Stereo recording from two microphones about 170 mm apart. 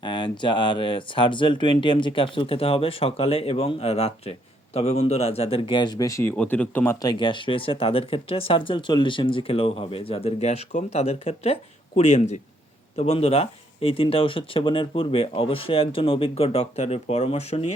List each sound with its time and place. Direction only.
0.0 s speech: 25° left (ahead or behind)
6.3 s speech: 10° left (ahead or behind)
7.0 s speech: 25° left (ahead or behind)